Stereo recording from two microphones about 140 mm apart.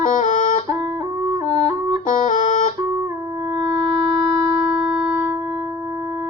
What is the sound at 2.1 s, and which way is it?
Music, 65° left (ahead or behind).